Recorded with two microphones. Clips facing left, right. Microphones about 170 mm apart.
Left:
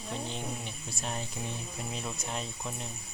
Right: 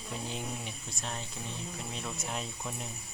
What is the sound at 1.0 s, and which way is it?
Speech, 10° left (ahead or behind).